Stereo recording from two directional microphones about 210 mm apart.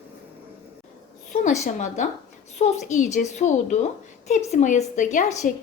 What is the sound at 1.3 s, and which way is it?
A woman's voice, 35° left (ahead or behind).